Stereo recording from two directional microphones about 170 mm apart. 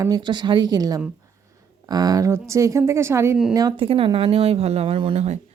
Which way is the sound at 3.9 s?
35° right (ahead or behind).